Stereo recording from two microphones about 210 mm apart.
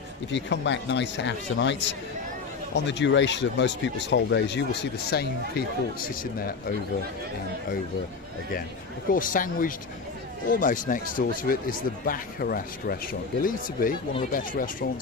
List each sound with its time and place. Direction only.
0.3 s speech: 60° left (ahead or behind)
9.0 s speech: 40° left (ahead or behind)